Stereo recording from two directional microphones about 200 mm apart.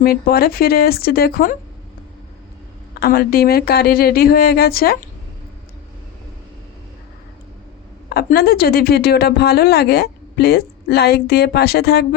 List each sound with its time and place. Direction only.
0.0 s speech: 50° left (ahead or behind)
3.0 s speech: 50° left (ahead or behind)
8.1 s speech: 50° left (ahead or behind)